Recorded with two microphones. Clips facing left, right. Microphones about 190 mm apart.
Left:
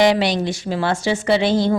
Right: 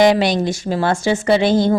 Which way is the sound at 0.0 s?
45° right (ahead or behind).